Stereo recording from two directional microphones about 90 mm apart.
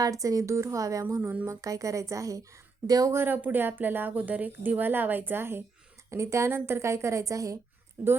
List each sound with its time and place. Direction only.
0.0 s a woman's voice: 40° right (ahead or behind)
1.2 s speech: 15° right (ahead or behind)
1.5 s a woman's voice: 40° right (ahead or behind)
3.1 s a woman's voice: 25° right (ahead or behind)